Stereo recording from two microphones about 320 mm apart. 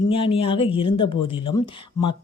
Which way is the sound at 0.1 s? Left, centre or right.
Centre.